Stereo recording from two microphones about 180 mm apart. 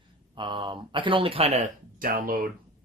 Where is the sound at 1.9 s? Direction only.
50° right (ahead or behind).